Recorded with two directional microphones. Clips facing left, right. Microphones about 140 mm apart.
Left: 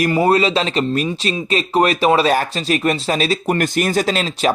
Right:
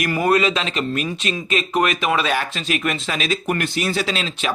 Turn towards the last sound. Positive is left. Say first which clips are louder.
# left 6 dB
turn(degrees=40)  # may be behind; listen again after turning